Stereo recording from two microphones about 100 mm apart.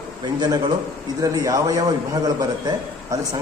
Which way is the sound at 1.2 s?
35° right (ahead or behind).